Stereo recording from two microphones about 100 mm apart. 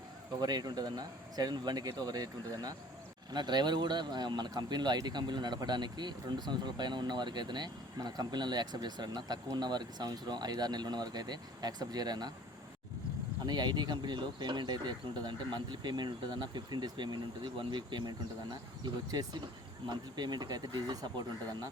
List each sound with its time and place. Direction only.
0.3 s speech: 45° right (ahead or behind)
13.4 s speech: 45° right (ahead or behind)
19.9 s speech: 45° right (ahead or behind)